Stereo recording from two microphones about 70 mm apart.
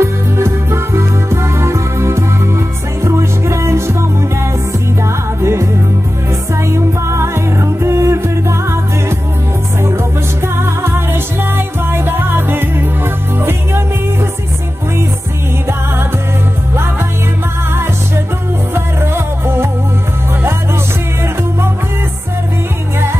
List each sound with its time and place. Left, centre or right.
0.0 s music: right
9.8 s music: right
19.1 s music: right